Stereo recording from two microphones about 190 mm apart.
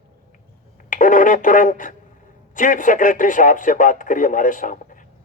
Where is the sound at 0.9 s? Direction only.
45° left (ahead or behind).